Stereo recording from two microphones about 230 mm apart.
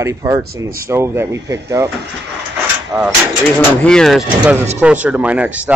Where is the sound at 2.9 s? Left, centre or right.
Centre.